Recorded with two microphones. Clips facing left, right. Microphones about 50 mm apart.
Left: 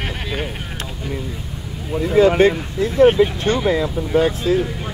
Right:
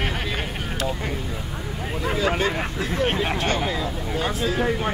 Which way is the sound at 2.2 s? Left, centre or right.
Left.